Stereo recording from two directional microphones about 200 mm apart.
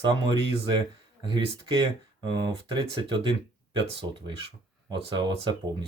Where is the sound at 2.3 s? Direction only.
20° right (ahead or behind).